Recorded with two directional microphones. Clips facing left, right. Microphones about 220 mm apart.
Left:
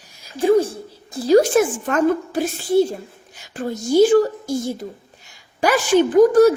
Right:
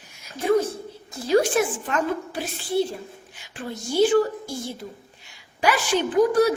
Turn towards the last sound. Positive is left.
turn(degrees=45)  # may be behind; listen again after turning